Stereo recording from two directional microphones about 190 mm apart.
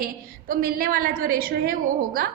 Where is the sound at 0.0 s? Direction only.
50° right (ahead or behind).